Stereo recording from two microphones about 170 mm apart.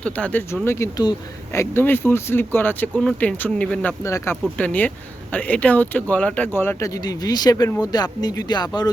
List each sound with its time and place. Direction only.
0.0 s speech: 10° left (ahead or behind)
4.0 s speech: 20° left (ahead or behind)